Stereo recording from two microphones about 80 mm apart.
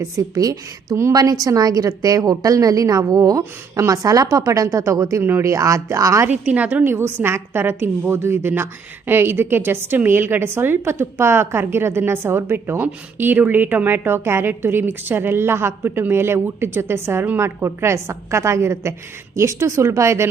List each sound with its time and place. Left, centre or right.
0.0 s a woman's voice: right
6.2 s a woman's voice: centre; by 20.3 s right